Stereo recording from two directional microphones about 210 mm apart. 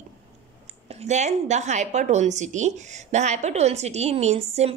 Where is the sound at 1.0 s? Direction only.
35° right (ahead or behind).